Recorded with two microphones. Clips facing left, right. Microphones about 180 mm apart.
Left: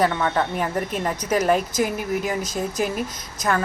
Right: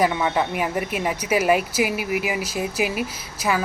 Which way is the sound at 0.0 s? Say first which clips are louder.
Even; 10° right (ahead or behind).